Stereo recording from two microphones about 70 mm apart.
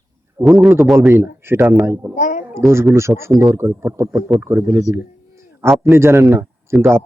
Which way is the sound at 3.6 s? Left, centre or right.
Right.